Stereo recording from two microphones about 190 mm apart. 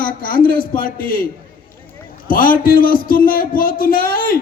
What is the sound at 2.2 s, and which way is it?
Speech, 50° left (ahead or behind).